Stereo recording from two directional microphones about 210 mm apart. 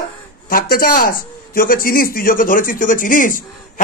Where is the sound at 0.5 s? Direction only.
45° left (ahead or behind).